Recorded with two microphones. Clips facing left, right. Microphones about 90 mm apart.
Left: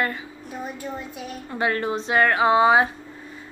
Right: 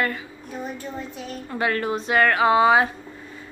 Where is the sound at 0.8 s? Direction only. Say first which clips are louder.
Even; 5° left (ahead or behind).